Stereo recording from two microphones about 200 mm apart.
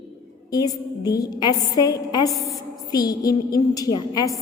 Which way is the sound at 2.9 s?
20° left (ahead or behind).